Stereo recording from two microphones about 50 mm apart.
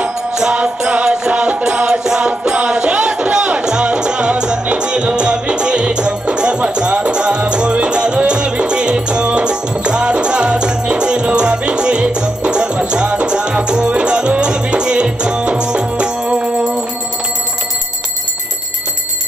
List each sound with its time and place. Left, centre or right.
0.3 s music: centre
0.6 s music: right